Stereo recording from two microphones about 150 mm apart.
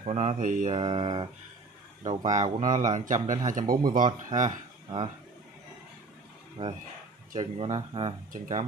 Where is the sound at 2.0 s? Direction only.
55° right (ahead or behind).